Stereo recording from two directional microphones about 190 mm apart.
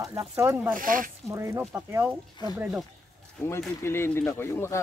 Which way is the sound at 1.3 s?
15° right (ahead or behind).